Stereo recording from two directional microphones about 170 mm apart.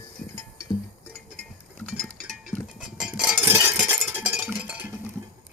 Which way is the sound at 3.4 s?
15° right (ahead or behind).